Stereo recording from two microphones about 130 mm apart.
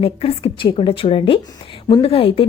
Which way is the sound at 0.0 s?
50° left (ahead or behind).